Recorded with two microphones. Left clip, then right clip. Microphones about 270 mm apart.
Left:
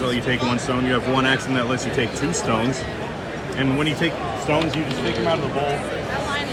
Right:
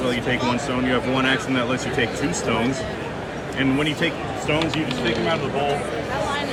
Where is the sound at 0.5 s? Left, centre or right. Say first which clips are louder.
Left 1 dB; left.